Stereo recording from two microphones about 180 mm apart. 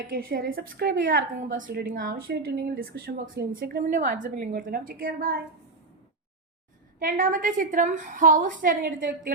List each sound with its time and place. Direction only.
0.1 s a woman's voice: 55° right (ahead or behind)
7.0 s a woman's voice: 50° right (ahead or behind)